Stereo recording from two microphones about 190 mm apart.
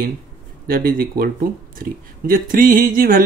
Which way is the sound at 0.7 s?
50° right (ahead or behind).